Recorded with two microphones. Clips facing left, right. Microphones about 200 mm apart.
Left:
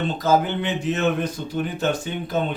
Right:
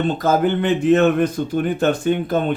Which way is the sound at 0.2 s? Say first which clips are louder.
Even; 55° right (ahead or behind).